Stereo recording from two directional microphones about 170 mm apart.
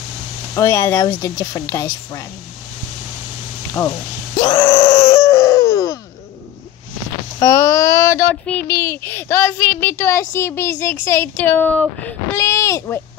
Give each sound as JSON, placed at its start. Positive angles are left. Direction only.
{"t": 0.6, "sound": "speech", "side_deg": 20}
{"t": 4.4, "sound": "groan", "side_deg": 25}
{"t": 5.1, "sound": "baby cry", "side_deg": 15}
{"t": 7.3, "sound": "speech", "side_deg": 15}